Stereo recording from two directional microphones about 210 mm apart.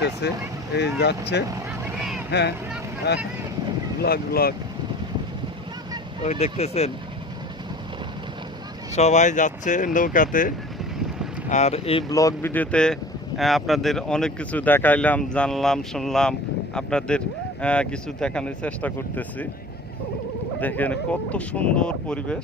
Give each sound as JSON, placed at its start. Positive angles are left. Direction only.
{"t": 0.0, "sound": "speech", "side_deg": 55}
{"t": 2.0, "sound": "vehicle", "side_deg": -5}
{"t": 3.1, "sound": "speech", "side_deg": 50}
{"t": 6.4, "sound": "speech", "side_deg": 30}
{"t": 8.9, "sound": "speech", "side_deg": 30}
{"t": 20.6, "sound": "speech", "side_deg": 10}